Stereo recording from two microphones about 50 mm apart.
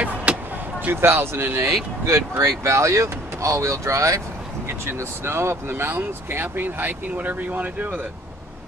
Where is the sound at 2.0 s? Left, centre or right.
Right.